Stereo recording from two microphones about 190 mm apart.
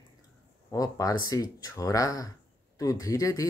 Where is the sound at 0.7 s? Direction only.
20° left (ahead or behind).